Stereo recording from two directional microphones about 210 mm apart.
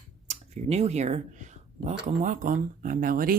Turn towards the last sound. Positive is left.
turn(degrees=-45)  # may be behind; listen again after turning